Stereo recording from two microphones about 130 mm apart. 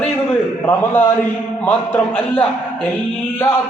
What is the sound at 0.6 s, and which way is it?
A man's voice, 15° left (ahead or behind).